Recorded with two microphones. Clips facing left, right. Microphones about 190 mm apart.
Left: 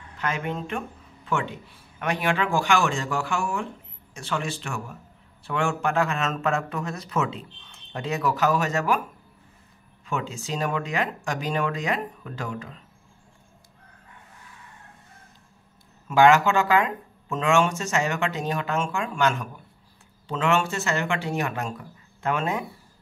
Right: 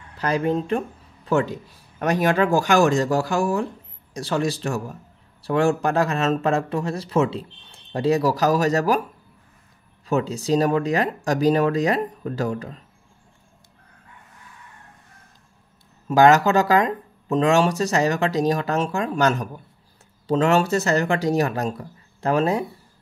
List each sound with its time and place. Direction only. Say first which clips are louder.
0.2 s speech: right 7 dB; 35° right (ahead or behind)
10.0 s speech: right 8 dB; 40° right (ahead or behind)
16.1 s speech: right 3 dB; 40° right (ahead or behind)